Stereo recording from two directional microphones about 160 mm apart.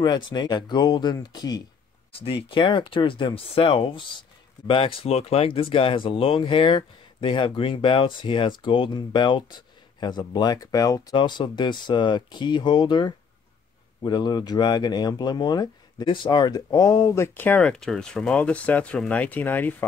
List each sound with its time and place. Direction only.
0.0 s speech: 25° left (ahead or behind)
2.1 s speech: 35° left (ahead or behind); by 19.7 s 10° left (ahead or behind)